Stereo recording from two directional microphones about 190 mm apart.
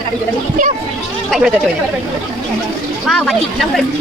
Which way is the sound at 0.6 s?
45° right (ahead or behind).